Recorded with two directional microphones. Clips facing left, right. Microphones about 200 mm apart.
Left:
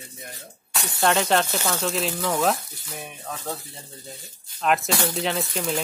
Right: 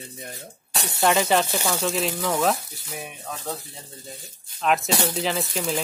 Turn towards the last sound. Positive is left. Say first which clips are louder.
# even
turn(degrees=0)  # may be behind; listen again after turning